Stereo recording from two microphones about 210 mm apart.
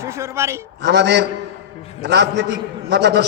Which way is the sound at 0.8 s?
50° right (ahead or behind).